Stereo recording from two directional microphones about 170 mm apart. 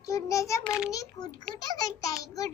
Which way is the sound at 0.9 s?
20° left (ahead or behind).